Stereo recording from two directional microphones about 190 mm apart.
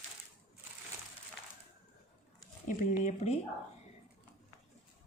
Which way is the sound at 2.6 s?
40° left (ahead or behind).